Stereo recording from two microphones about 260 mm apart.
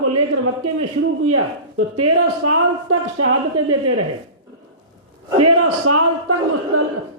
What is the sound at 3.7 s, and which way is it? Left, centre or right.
Speech, right.